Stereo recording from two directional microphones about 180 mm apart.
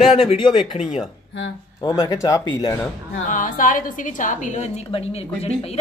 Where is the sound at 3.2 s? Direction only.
50° left (ahead or behind).